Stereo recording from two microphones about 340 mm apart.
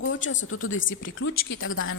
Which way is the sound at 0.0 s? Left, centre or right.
Left.